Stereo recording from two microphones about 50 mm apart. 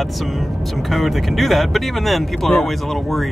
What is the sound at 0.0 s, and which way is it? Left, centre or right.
Speech, centre.